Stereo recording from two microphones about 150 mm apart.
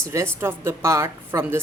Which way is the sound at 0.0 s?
20° right (ahead or behind).